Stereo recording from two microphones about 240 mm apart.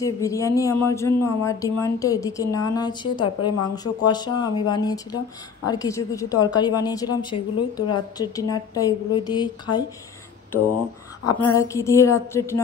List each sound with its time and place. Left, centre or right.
0.0 s speech: centre
11.5 s speech: centre